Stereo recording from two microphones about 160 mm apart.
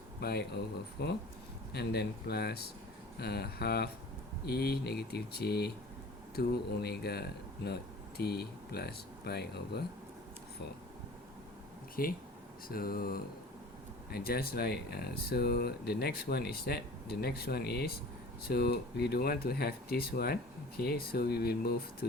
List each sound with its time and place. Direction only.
0.2 s speech: 85° left
12.0 s speech: 65° left (ahead or behind)